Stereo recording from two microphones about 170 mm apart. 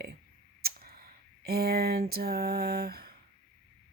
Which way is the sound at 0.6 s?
60° right (ahead or behind).